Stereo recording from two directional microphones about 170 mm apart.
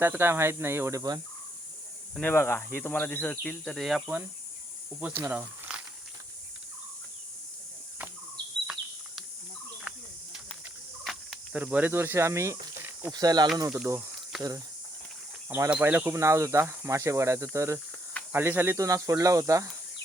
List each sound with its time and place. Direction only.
0.0 s speech: 15° right (ahead or behind)
2.2 s speech: 15° left (ahead or behind); by 5.8 s 10° right (ahead or behind)
11.0 s fowl: centre (ahead or behind); by 12.5 s 15° right (ahead or behind)
12.8 s speech: 15° right (ahead or behind)
15.4 s speech: 10° right (ahead or behind)